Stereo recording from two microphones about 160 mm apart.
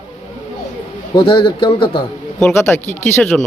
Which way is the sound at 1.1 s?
30° left (ahead or behind).